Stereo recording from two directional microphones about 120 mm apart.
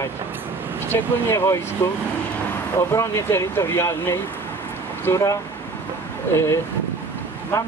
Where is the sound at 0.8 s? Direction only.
20° left (ahead or behind).